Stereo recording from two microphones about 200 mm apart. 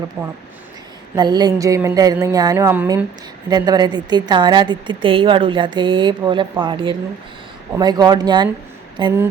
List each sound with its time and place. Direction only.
0.2 s speech: centre (ahead or behind)
1.1 s a woman's voice: 20° right (ahead or behind)